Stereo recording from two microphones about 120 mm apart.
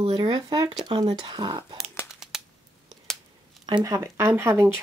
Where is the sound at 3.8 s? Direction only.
25° right (ahead or behind).